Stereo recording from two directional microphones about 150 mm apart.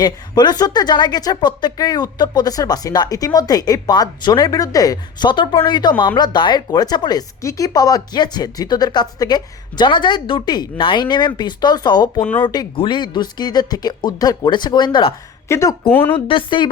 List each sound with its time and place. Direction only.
0.0 s speech: 30° left (ahead or behind)
15.4 s a woman's voice: 20° left (ahead or behind)
16.1 s speech: 35° left (ahead or behind)